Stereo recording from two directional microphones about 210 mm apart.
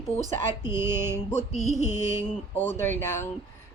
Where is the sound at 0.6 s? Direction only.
10° right (ahead or behind).